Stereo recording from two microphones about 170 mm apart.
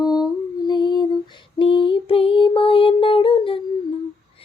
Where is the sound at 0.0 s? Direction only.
25° left (ahead or behind).